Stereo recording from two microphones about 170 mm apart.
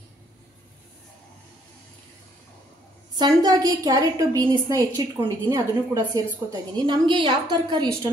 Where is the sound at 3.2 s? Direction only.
25° right (ahead or behind).